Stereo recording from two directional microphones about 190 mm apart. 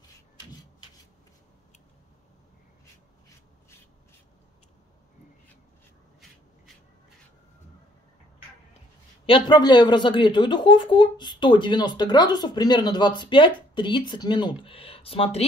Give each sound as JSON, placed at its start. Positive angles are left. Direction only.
{"t": 9.2, "sound": "speech", "side_deg": 25}